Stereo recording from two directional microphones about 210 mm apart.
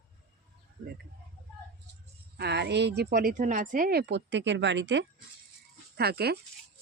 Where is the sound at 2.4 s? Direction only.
50° right (ahead or behind).